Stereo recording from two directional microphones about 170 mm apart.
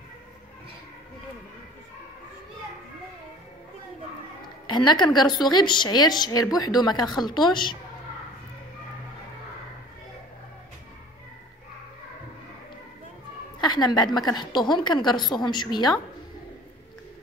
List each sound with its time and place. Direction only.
4.6 s a woman's voice: 25° left (ahead or behind)
13.6 s a woman's voice: 25° left (ahead or behind)